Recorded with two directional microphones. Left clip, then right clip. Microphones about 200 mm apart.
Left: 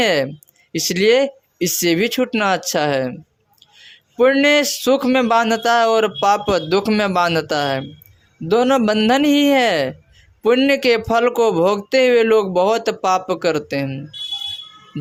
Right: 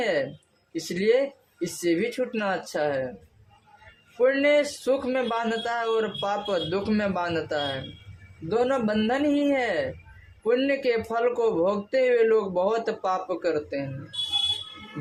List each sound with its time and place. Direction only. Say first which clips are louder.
0.0 s a man's voice: left 9 dB; 40° left (ahead or behind)
4.2 s a man's voice: left 7 dB; 40° left (ahead or behind)